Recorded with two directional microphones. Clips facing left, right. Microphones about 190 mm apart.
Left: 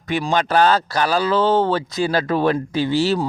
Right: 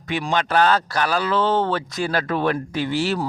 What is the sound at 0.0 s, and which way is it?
Speech, 40° left (ahead or behind).